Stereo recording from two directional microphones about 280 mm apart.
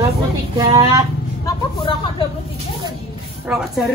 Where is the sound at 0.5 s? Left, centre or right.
Centre.